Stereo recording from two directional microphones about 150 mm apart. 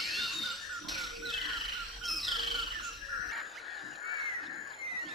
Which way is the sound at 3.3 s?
Centre (ahead or behind).